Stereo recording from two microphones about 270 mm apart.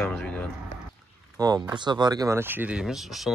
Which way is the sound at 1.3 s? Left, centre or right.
Centre.